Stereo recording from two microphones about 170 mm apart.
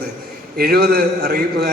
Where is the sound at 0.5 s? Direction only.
70° right (ahead or behind).